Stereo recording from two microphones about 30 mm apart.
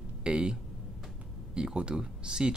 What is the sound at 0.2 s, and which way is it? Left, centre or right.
Speech, right.